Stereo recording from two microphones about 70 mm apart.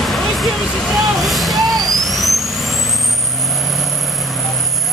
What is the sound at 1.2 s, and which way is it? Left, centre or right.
Vehicle, centre.